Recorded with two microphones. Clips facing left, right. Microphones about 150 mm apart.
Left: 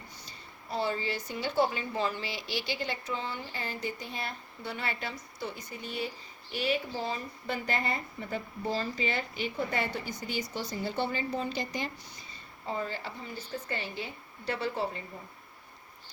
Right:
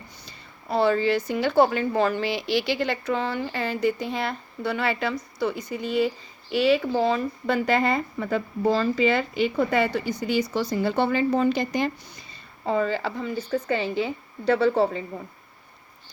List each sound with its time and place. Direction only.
0.3 s a woman's voice: 70° right (ahead or behind)
12.6 s speech: 90° right